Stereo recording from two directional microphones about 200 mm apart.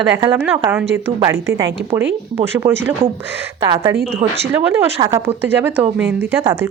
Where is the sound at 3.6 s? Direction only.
20° right (ahead or behind).